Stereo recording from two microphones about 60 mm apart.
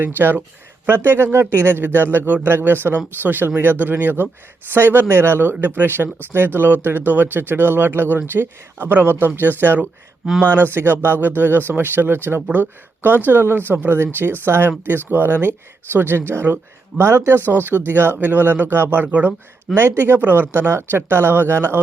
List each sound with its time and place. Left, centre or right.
0.0 s a man's voice: right
19.0 s speech: right
19.7 s speech: right
20.1 s a man's voice: right